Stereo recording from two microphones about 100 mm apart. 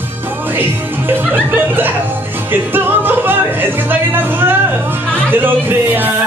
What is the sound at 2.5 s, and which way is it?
Music, 20° right (ahead or behind).